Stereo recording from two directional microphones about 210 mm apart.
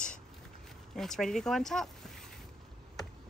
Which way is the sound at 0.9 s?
Centre (ahead or behind).